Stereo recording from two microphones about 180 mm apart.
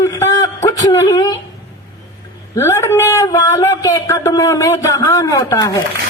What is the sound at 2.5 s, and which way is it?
Speech, 15° left (ahead or behind).